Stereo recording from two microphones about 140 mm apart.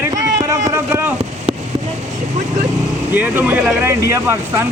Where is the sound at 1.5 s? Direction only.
35° right (ahead or behind).